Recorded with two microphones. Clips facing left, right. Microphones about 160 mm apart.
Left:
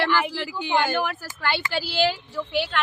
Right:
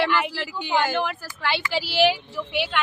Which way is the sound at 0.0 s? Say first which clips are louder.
Even; centre (ahead or behind).